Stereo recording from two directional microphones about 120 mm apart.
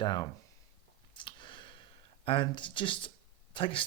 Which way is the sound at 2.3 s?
45° left (ahead or behind).